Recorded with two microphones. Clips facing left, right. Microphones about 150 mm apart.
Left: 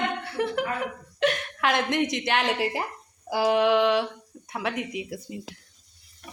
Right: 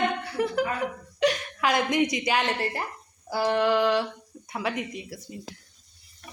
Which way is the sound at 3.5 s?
Centre (ahead or behind).